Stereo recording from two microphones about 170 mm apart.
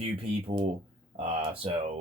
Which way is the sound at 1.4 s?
35° right (ahead or behind).